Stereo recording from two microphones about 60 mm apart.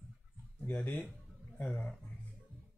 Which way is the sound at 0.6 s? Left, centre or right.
Left.